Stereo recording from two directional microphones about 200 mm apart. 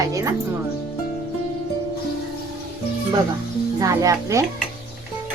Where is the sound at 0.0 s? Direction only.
15° right (ahead or behind).